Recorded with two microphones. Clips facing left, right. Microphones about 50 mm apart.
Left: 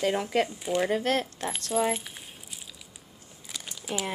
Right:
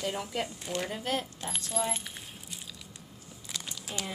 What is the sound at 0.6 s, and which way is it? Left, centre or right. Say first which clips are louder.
Speech: left 8 dB; centre.